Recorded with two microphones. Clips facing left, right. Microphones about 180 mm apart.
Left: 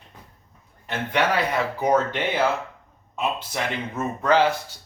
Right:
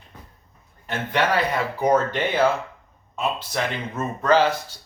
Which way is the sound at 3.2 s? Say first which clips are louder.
Right 1 dB; 10° left (ahead or behind).